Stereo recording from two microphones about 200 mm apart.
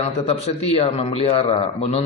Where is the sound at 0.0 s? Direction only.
30° left (ahead or behind).